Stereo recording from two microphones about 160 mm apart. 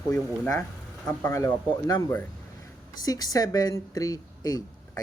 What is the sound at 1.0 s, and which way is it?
Speech, 15° left (ahead or behind).